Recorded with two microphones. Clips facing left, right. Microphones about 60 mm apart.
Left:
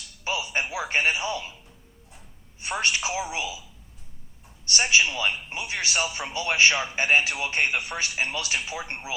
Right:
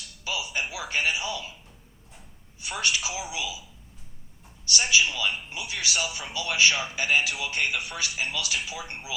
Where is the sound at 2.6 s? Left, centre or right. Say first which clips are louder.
Left 2 dB; left.